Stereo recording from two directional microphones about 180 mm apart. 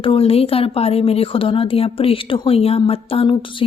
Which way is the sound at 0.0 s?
30° left (ahead or behind).